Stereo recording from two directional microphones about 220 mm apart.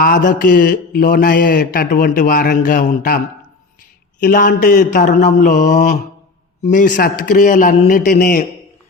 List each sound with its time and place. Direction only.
0.0 s a man's voice: 40° left (ahead or behind)
4.2 s a man's voice: 40° left (ahead or behind)